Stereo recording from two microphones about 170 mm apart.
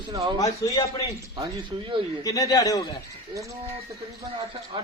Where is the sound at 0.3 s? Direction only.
20° left (ahead or behind).